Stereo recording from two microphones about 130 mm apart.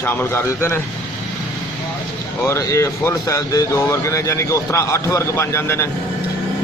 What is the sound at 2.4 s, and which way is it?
Speech, 20° left (ahead or behind).